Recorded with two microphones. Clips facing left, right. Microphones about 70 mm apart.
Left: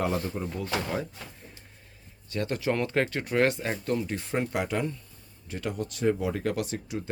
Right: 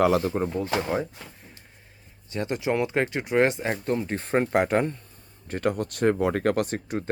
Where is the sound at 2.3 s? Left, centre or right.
Right.